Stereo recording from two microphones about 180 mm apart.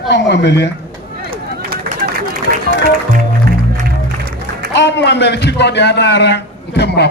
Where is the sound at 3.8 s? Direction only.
55° right (ahead or behind).